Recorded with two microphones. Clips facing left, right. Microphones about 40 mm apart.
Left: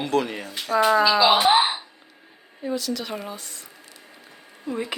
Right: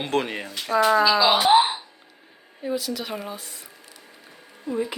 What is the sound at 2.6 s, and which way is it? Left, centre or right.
Speech, centre.